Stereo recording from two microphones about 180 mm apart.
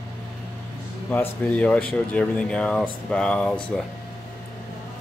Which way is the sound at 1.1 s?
10° left (ahead or behind).